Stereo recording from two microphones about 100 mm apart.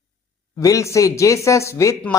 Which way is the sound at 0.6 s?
30° left (ahead or behind).